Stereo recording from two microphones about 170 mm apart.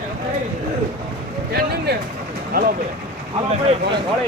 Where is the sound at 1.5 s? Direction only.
65° right (ahead or behind).